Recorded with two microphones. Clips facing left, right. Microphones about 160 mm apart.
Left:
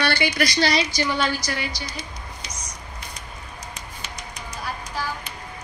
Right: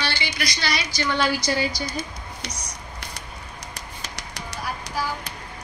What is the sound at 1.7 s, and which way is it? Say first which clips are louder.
Speech: right 4 dB; 45° right (ahead or behind).